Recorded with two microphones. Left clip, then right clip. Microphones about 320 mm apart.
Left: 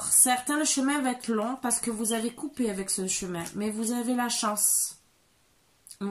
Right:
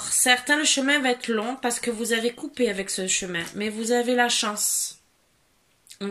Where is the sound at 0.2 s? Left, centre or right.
Centre.